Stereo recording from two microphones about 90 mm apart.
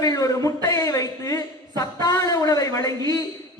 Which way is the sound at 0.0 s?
40° left (ahead or behind).